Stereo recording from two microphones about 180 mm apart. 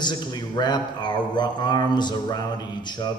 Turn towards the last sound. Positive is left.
turn(degrees=25)  # may be behind; listen again after turning